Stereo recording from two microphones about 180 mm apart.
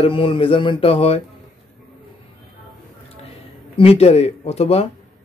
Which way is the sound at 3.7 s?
35° left (ahead or behind).